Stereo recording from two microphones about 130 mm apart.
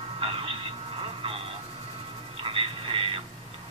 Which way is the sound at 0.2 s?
45° right (ahead or behind).